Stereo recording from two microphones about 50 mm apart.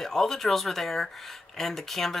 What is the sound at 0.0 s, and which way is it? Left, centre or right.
Speech, centre.